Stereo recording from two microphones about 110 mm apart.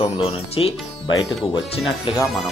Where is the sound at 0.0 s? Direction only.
65° left (ahead or behind).